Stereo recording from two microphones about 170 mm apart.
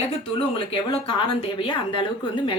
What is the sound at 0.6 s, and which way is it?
Speech, 30° left (ahead or behind).